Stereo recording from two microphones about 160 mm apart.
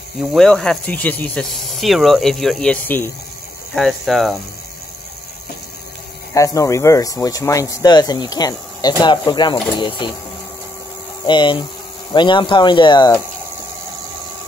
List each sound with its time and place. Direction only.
0.2 s speech: centre (ahead or behind)
6.3 s speech: 20° left (ahead or behind)
11.2 s speech: 30° left (ahead or behind)